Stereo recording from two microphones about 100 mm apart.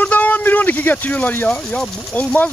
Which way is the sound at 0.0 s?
15° left (ahead or behind).